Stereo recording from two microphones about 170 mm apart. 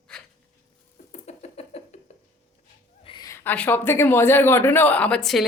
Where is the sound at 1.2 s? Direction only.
40° left (ahead or behind).